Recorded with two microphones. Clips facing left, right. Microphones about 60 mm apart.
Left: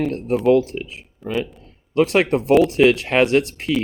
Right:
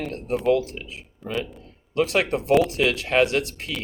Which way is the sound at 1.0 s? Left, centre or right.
Centre.